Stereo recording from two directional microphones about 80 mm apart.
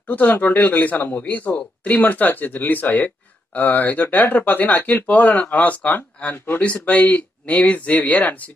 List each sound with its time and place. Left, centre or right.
0.0 s speech: left
6.6 s speech: centre